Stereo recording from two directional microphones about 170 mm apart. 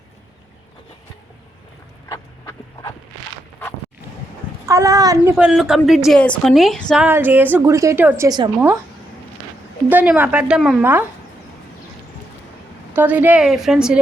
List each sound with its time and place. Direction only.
2.0 s a sound: 20° left (ahead or behind)
4.6 s a child's voice: 20° right (ahead or behind)
5.3 s a woman's voice: 5° right (ahead or behind)
7.0 s a woman's voice: 10° right (ahead or behind)
9.9 s a woman's voice: 10° right (ahead or behind)
12.9 s a woman's voice: 10° right (ahead or behind)